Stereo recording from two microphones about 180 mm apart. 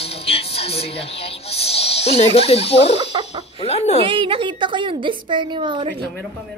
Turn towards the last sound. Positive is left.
turn(degrees=-25)  # may be behind; listen again after turning